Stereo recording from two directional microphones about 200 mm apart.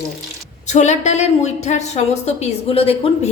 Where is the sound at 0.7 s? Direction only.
35° left (ahead or behind).